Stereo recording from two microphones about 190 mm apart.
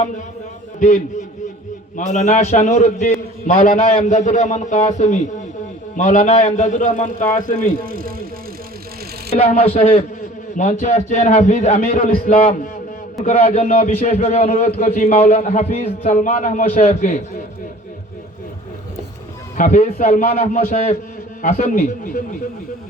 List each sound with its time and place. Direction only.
2.0 s a man's voice: 40° left (ahead or behind)
7.9 s bicycle: 50° right (ahead or behind)
9.3 s a man's voice: 35° left (ahead or behind); by 12.4 s 50° left (ahead or behind)
13.2 s a man's voice: 35° left (ahead or behind)
19.5 s a man's voice: 45° left (ahead or behind)